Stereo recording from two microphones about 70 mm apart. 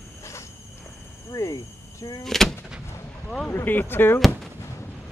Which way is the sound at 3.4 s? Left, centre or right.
Left.